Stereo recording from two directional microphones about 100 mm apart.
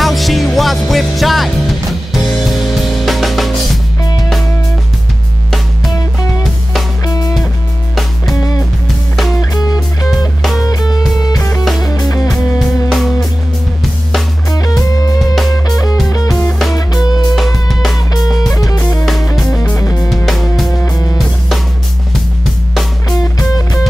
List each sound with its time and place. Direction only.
0.0 s music: centre (ahead or behind)
7.1 s music: 40° left (ahead or behind)
9.4 s music: 40° left (ahead or behind)
12.9 s music: centre (ahead or behind)
15.7 s music: 40° left (ahead or behind)
17.4 s music: centre (ahead or behind)
18.1 s music: 40° left (ahead or behind)
19.5 s music: 15° left (ahead or behind)
19.8 s music: 30° left (ahead or behind)
23.0 s music: 35° left (ahead or behind)